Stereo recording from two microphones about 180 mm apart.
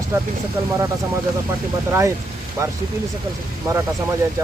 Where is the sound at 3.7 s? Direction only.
20° right (ahead or behind).